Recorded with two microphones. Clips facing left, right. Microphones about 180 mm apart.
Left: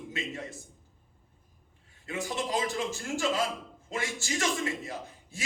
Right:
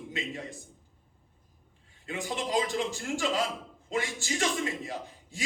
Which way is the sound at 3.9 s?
20° right (ahead or behind).